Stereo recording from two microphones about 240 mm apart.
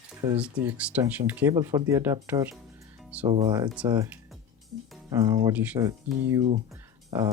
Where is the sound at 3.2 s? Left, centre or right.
Right.